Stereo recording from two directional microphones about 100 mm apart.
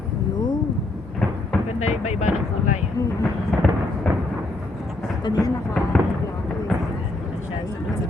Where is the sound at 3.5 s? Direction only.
Centre (ahead or behind).